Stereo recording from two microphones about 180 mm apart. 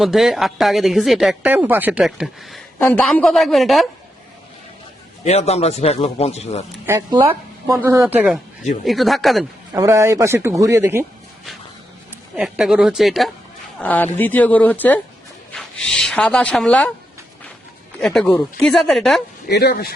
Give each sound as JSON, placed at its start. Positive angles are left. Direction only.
{"t": 0.0, "sound": "speech", "side_deg": 0}
{"t": 2.7, "sound": "speech", "side_deg": 10}
{"t": 5.2, "sound": "speech", "side_deg": 40}
{"t": 6.8, "sound": "a man's voice", "side_deg": -15}
{"t": 9.7, "sound": "a man's voice", "side_deg": -15}
{"t": 12.4, "sound": "speech", "side_deg": -5}
{"t": 18.0, "sound": "speech", "side_deg": 0}
{"t": 19.5, "sound": "speech", "side_deg": 65}